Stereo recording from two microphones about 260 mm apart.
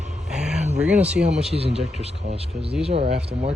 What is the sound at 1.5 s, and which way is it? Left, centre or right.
Speech, right.